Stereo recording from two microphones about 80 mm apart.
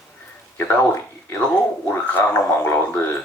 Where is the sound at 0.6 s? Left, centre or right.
Left.